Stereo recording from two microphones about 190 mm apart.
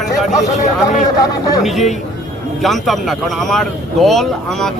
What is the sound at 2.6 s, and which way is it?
A man's voice, centre (ahead or behind).